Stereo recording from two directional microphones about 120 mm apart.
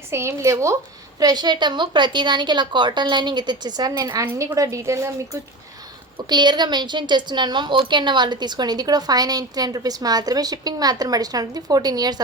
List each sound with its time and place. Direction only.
0.1 s a woman's voice: 25° right (ahead or behind)
6.2 s a woman's voice: 35° right (ahead or behind)